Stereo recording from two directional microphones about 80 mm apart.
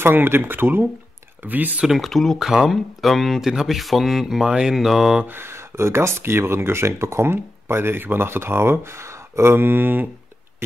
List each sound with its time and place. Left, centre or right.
0.0 s speech: right
1.8 s speech: centre
5.2 s speech: right